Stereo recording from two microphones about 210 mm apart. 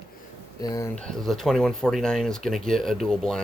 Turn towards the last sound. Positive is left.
turn(degrees=0)  # may be behind; listen again after turning